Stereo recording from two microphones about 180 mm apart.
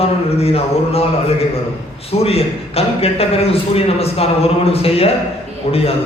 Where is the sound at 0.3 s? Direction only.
35° left (ahead or behind).